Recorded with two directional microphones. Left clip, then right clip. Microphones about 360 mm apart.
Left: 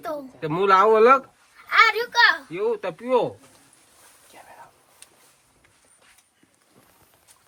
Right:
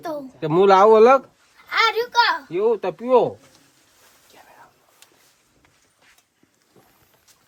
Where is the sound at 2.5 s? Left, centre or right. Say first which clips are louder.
Right 5 dB; right.